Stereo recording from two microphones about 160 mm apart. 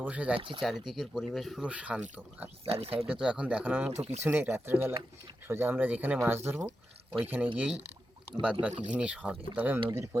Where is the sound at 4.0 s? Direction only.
45° right (ahead or behind).